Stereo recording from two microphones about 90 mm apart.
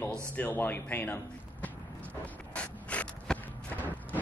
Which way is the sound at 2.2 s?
15° left (ahead or behind).